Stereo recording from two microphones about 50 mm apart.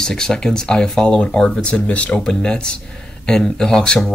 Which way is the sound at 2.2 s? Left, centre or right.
Centre.